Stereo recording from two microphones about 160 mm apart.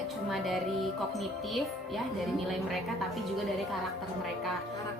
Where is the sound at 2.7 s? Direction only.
Centre (ahead or behind).